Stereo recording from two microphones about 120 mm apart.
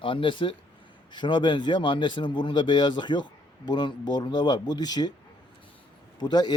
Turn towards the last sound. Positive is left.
turn(degrees=35)  # may be behind; listen again after turning